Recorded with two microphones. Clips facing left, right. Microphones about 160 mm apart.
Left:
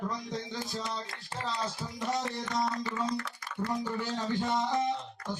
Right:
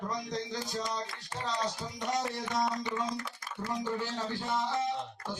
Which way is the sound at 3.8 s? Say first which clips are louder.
Left 1 dB; 20° left (ahead or behind).